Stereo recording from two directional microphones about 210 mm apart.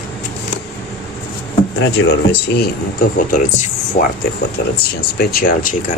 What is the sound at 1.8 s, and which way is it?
Speech, 60° left (ahead or behind).